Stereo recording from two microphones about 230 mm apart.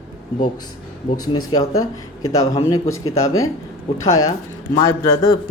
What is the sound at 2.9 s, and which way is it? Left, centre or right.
Speech, left.